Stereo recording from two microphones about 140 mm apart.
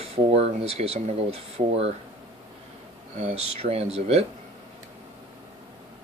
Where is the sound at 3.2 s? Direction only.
45° right (ahead or behind).